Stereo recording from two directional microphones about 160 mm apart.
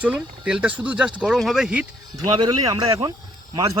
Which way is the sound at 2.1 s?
25° right (ahead or behind).